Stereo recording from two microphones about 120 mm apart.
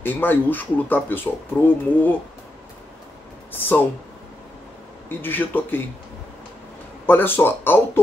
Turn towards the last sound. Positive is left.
turn(degrees=20)  # may be behind; listen again after turning